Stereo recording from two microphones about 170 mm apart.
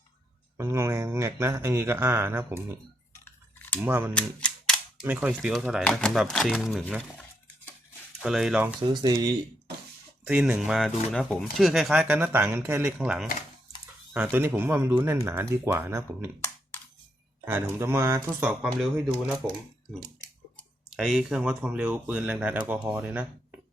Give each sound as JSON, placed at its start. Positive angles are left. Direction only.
{"t": 0.5, "sound": "speech", "side_deg": -15}
{"t": 3.2, "sound": "a sound", "side_deg": 10}
{"t": 3.8, "sound": "speech", "side_deg": -10}
{"t": 4.1, "sound": "cap gun", "side_deg": 5}
{"t": 5.0, "sound": "speech", "side_deg": -10}
{"t": 8.2, "sound": "speech", "side_deg": 0}
{"t": 8.8, "sound": "speech", "side_deg": -25}
{"t": 10.2, "sound": "speech", "side_deg": -5}
{"t": 17.4, "sound": "speech", "side_deg": -15}
{"t": 20.9, "sound": "speech", "side_deg": 0}